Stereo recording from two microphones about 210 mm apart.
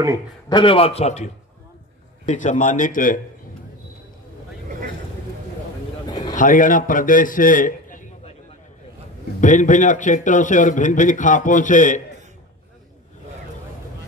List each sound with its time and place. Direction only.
0.5 s a man's voice: 25° left (ahead or behind); by 3.2 s 40° left (ahead or behind)
6.0 s a sound: 20° left (ahead or behind)
6.3 s a man's voice: 40° left (ahead or behind)
9.4 s a man's voice: 35° left (ahead or behind)